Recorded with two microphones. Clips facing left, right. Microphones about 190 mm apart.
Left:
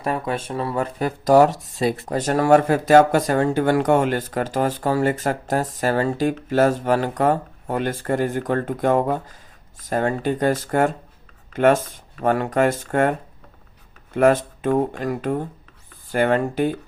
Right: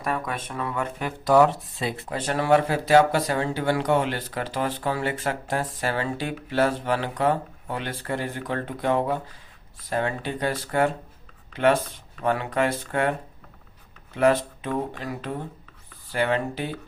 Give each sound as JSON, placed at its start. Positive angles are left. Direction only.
{"t": 0.0, "sound": "speech", "side_deg": 30}